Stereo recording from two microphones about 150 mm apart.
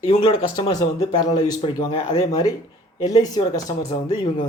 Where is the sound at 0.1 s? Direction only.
40° left (ahead or behind).